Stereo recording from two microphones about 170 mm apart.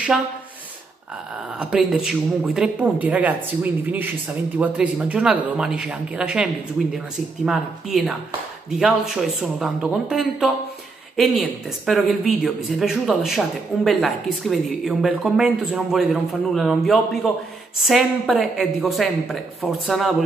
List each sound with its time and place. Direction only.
1.6 s speech: 5° right (ahead or behind)